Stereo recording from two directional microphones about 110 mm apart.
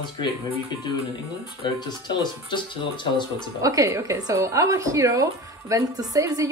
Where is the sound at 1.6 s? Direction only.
45° left (ahead or behind).